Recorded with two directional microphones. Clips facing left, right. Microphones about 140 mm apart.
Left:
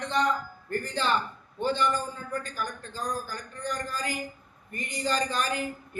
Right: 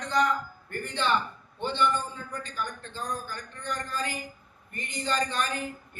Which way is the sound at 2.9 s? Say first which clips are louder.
Left 2 dB; 35° left (ahead or behind).